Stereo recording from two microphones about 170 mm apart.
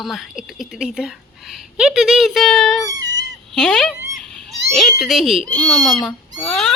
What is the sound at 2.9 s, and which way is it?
Cat, 20° right (ahead or behind).